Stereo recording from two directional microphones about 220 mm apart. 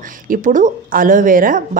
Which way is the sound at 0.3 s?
35° right (ahead or behind).